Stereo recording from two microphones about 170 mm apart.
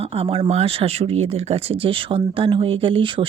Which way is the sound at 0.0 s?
35° right (ahead or behind).